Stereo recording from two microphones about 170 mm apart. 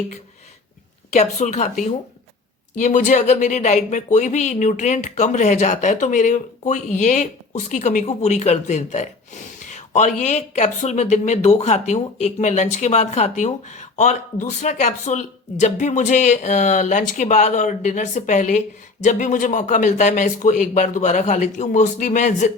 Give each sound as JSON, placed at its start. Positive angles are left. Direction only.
{"t": 1.1, "sound": "speech", "side_deg": 45}